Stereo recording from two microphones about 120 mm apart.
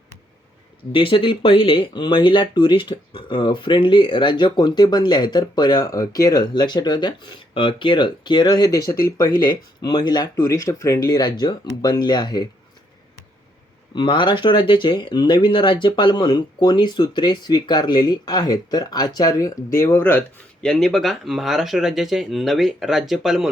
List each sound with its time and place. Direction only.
0.9 s speech: 45° left (ahead or behind)
13.9 s speech: 40° left (ahead or behind); by 20.2 s 20° left (ahead or behind)
20.6 s speech: 5° left (ahead or behind)